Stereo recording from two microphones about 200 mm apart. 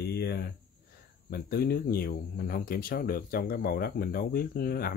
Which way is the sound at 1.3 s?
50° left (ahead or behind).